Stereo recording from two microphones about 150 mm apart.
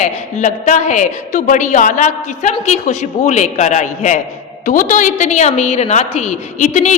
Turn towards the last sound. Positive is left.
turn(degrees=55)  # may be behind; listen again after turning